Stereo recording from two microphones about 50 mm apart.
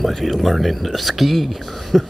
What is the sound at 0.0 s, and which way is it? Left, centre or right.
Speech, centre.